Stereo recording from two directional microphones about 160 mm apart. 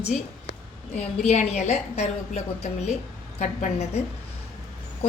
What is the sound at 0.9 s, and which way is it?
A woman's voice, 45° left (ahead or behind).